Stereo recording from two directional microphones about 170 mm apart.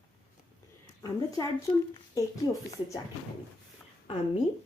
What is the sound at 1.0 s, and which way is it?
Speech, 20° left (ahead or behind).